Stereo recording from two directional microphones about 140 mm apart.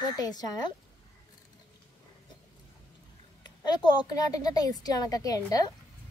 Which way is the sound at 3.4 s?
30° left (ahead or behind).